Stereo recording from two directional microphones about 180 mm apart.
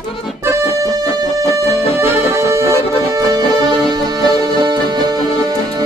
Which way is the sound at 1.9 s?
15° right (ahead or behind).